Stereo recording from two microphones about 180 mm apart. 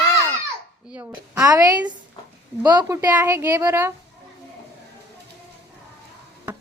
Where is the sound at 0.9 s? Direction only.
5° right (ahead or behind).